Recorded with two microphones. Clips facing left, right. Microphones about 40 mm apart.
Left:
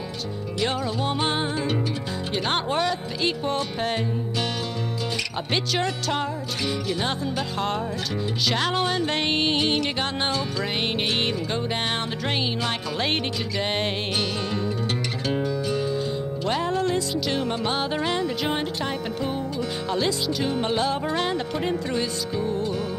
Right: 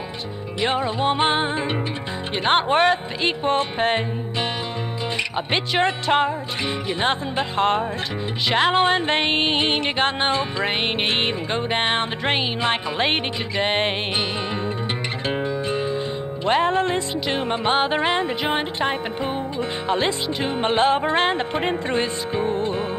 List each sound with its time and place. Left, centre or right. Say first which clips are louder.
0.6 s music: right 4 dB; right
5.5 s music: right 4 dB; right
15.2 s music: right 1 dB; right